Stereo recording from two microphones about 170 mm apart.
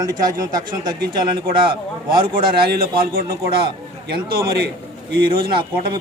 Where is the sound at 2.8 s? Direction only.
65° right (ahead or behind).